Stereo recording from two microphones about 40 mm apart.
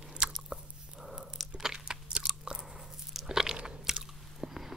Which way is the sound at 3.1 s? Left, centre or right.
Centre.